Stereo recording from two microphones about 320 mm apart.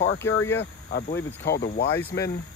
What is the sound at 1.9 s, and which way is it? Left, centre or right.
Speech, centre.